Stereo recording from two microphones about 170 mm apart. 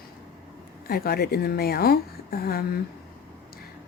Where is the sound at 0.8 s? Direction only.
65° left (ahead or behind).